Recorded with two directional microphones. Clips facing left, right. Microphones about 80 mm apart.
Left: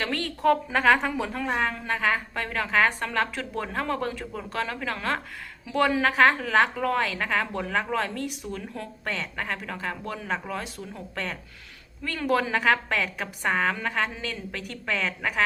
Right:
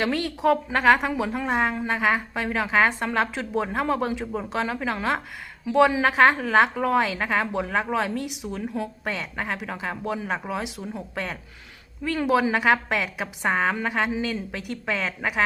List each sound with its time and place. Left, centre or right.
0.0 s a woman's voice: centre